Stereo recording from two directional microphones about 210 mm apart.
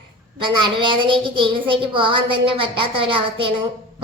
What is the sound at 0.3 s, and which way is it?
Child singing, 25° right (ahead or behind).